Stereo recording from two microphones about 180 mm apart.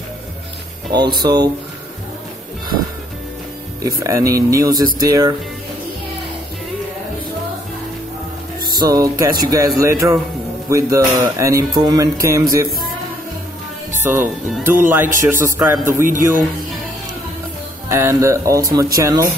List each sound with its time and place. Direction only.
1.2 s speech: 20° right (ahead or behind)
4.0 s speech: 15° right (ahead or behind)
8.6 s speech: 20° right (ahead or behind)
14.0 s speech: 10° right (ahead or behind)
17.8 s speech: 15° right (ahead or behind)